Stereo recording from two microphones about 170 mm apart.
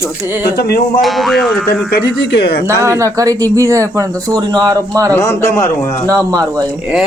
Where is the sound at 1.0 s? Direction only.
Centre (ahead or behind).